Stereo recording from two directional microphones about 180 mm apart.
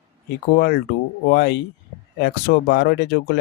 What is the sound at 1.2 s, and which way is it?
Speech, 65° left (ahead or behind).